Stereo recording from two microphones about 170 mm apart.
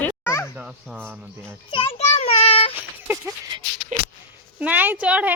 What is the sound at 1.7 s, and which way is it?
Child singing, 30° left (ahead or behind).